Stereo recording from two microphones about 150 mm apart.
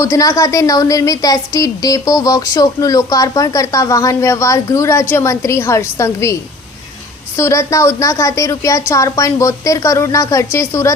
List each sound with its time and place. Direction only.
0.0 s a woman's voice: 20° left (ahead or behind)
7.3 s a woman's voice: 20° left (ahead or behind)